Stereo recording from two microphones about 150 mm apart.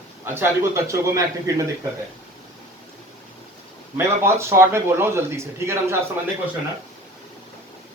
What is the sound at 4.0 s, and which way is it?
Speech, 20° right (ahead or behind).